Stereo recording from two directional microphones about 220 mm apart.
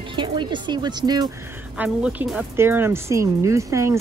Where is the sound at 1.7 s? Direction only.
5° right (ahead or behind).